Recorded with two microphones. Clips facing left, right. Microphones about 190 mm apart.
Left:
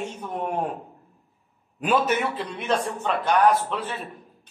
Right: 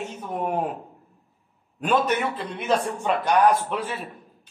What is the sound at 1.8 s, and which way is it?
A man's voice, centre (ahead or behind).